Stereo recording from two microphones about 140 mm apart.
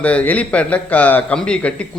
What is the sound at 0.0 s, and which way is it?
A man's voice, 10° left (ahead or behind).